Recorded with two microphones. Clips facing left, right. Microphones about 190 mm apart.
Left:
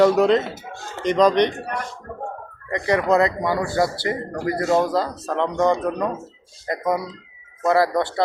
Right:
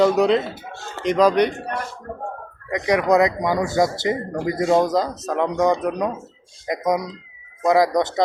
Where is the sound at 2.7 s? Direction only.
10° right (ahead or behind).